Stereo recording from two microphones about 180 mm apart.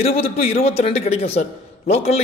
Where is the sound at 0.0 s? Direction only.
35° left (ahead or behind).